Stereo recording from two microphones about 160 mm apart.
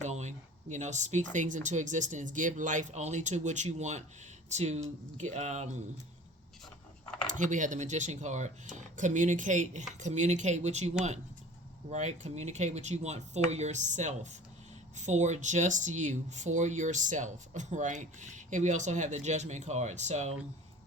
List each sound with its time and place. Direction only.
0.0 s speech: 45° right (ahead or behind)
7.3 s speech: 50° right (ahead or behind)